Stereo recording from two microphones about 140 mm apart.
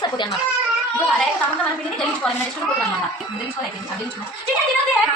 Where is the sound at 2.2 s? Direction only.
5° left (ahead or behind).